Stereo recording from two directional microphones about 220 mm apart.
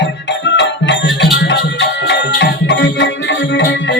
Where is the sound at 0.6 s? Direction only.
55° left (ahead or behind).